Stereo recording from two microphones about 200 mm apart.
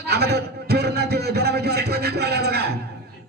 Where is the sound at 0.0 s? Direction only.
55° right (ahead or behind).